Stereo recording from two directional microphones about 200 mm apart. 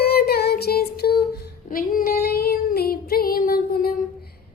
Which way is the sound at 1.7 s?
45° left (ahead or behind).